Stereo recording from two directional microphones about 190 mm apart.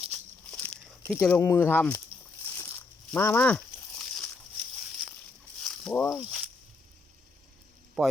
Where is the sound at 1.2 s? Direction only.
10° left (ahead or behind).